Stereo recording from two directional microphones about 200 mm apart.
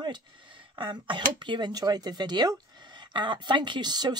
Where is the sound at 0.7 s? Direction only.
25° right (ahead or behind).